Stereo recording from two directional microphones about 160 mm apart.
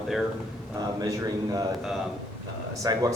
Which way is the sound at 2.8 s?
25° right (ahead or behind).